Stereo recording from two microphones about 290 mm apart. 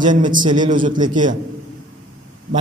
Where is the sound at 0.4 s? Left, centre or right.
Centre.